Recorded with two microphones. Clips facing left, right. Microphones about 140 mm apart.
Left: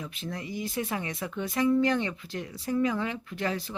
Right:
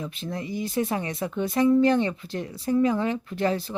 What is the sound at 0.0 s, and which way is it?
Speech, 30° right (ahead or behind).